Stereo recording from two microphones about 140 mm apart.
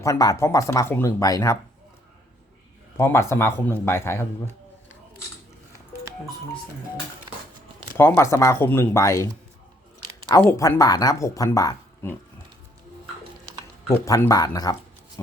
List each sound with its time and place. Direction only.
0.0 s speech: 25° left (ahead or behind)
1.2 s speech: 25° left (ahead or behind)
3.0 s speech: 20° left (ahead or behind)
7.9 s speech: 20° left (ahead or behind)
13.8 s speech: 20° left (ahead or behind)